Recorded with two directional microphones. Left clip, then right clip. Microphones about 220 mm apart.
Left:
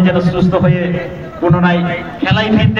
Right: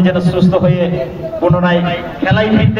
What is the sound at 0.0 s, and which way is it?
Mantra, 50° right (ahead or behind).